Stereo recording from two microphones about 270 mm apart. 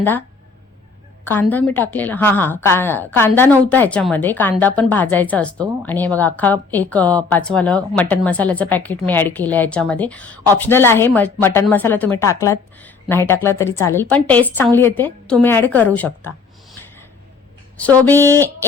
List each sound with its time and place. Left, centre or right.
1.2 s a woman's voice: centre
17.7 s a woman's voice: centre